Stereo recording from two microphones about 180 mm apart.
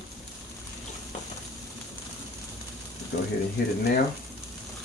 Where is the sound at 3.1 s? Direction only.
65° left (ahead or behind).